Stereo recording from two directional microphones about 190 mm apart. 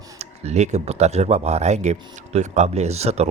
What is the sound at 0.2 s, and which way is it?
Speech, 35° right (ahead or behind).